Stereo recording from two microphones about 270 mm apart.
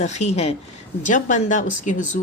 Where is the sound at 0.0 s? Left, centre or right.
Left.